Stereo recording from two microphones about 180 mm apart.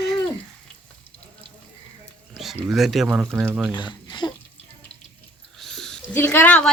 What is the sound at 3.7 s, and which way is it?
Speech, 25° left (ahead or behind).